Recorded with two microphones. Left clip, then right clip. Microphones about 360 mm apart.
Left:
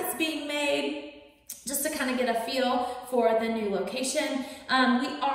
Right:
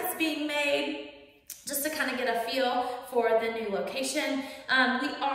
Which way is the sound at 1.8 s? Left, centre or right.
Centre.